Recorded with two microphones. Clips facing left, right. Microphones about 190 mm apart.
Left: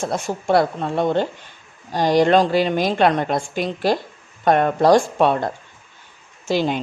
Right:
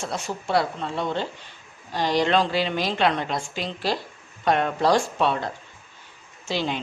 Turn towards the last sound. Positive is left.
turn(degrees=45)  # may be behind; listen again after turning